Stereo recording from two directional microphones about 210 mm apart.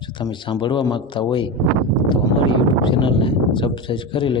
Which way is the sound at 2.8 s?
25° left (ahead or behind).